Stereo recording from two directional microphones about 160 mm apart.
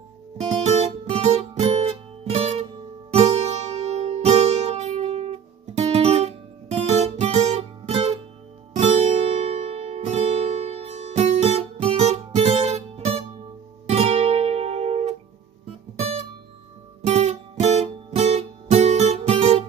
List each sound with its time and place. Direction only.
0.4 s guitar: 45° right (ahead or behind)
3.1 s music: 40° right (ahead or behind)
5.8 s guitar: 40° right (ahead or behind)
8.7 s music: 45° right (ahead or behind)